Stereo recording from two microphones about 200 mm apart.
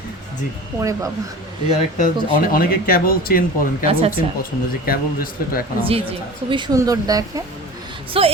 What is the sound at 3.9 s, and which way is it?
Speech, 30° right (ahead or behind).